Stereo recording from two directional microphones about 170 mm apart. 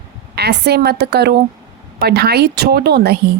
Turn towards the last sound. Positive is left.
turn(degrees=-70)  # may be behind; listen again after turning